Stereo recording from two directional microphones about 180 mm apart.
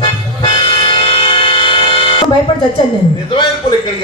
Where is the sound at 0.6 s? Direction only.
30° left (ahead or behind).